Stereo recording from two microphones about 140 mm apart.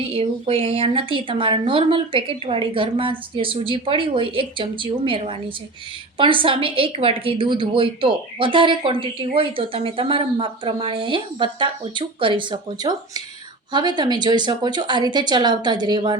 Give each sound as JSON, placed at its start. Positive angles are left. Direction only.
{"t": 0.1, "sound": "a woman's voice", "side_deg": -45}